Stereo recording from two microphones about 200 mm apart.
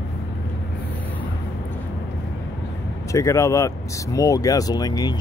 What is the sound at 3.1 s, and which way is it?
Speech, 15° left (ahead or behind).